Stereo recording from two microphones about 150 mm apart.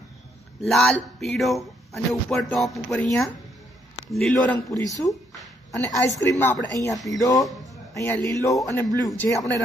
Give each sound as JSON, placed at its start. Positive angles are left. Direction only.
{"t": 0.6, "sound": "speech", "side_deg": 0}
{"t": 4.1, "sound": "a man's voice", "side_deg": 5}